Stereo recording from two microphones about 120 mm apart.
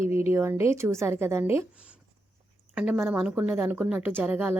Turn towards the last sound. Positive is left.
turn(degrees=-15)  # may be behind; listen again after turning